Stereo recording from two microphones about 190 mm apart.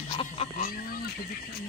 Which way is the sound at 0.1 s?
30° left (ahead or behind).